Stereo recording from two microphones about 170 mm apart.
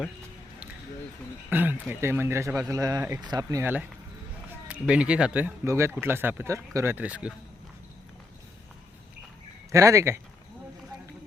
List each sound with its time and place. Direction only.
1.5 s speech: 10° right (ahead or behind)
9.7 s speech: 20° right (ahead or behind)